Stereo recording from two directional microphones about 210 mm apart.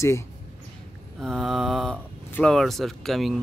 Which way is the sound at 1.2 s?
Centre (ahead or behind).